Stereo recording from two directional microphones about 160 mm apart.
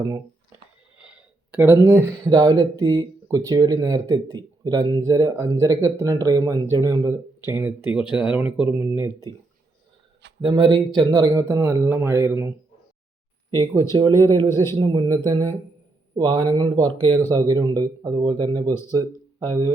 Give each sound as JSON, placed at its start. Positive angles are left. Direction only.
{"t": 1.0, "sound": "speech", "side_deg": -10}
{"t": 10.4, "sound": "speech", "side_deg": -30}
{"t": 13.9, "sound": "speech", "side_deg": -25}
{"t": 14.3, "sound": "a man's voice", "side_deg": 15}
{"t": 14.8, "sound": "speech", "side_deg": -25}